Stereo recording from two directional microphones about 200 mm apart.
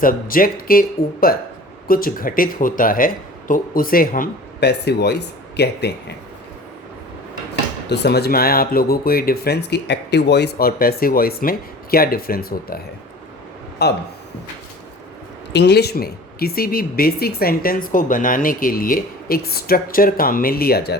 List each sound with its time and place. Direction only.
0.0 s speech: 45° left (ahead or behind)
7.9 s speech: 55° left (ahead or behind)
13.8 s speech: 55° left (ahead or behind)
15.5 s speech: 55° left (ahead or behind)